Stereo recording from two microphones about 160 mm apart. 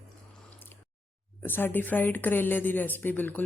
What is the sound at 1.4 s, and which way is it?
Speech, 15° left (ahead or behind).